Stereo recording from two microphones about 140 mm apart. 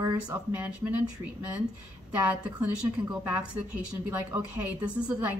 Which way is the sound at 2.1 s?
10° right (ahead or behind).